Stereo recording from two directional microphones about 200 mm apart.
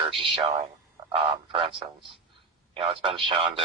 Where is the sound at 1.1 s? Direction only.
25° right (ahead or behind).